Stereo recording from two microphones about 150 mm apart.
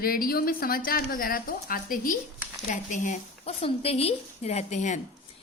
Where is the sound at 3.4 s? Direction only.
40° left (ahead or behind).